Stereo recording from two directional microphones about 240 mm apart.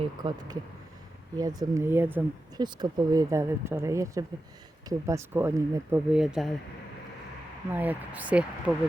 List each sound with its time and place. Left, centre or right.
0.0 s speech: centre
7.7 s speech: centre